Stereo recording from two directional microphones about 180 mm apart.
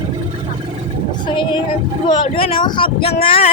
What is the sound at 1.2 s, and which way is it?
Speech, 25° left (ahead or behind).